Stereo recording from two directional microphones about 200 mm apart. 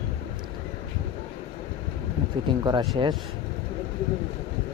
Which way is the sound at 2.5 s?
20° right (ahead or behind).